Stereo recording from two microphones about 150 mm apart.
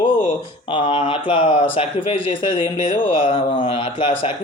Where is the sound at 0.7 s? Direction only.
35° left (ahead or behind).